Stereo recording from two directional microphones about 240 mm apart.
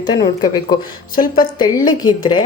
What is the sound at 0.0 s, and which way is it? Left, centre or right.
Speech, centre.